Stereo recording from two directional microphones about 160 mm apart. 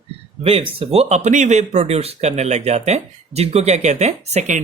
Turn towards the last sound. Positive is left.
turn(degrees=-45)  # may be behind; listen again after turning